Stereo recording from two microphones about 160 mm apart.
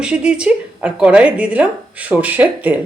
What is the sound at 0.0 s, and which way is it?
Speech, 5° right (ahead or behind).